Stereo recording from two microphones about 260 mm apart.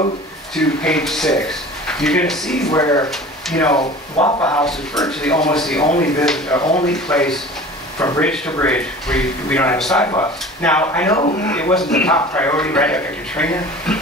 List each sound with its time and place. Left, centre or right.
0.6 s speech: centre
2.7 s speech: centre
3.1 s speech: centre
3.7 s speech: centre
4.6 s speech: centre
8.0 s speech: centre